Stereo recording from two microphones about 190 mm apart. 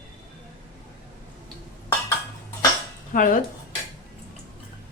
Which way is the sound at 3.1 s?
45° left (ahead or behind).